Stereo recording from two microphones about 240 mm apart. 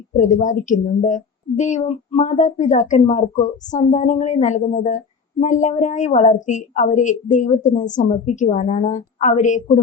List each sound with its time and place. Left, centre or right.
0.2 s a woman's voice: left